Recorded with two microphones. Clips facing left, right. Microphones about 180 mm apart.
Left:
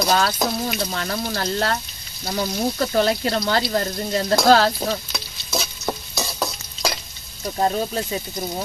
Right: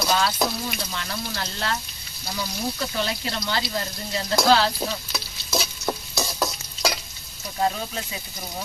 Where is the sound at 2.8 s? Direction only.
50° left (ahead or behind).